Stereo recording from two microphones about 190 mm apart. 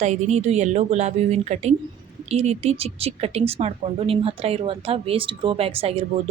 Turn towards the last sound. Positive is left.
turn(degrees=-30)  # may be behind; listen again after turning